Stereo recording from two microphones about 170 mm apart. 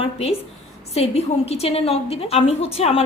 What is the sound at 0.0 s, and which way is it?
A woman's voice, 35° left (ahead or behind).